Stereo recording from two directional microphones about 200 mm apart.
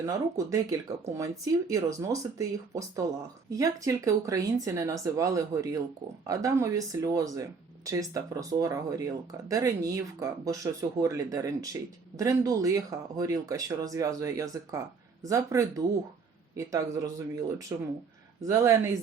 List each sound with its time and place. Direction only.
0.0 s speech: 15° right (ahead or behind)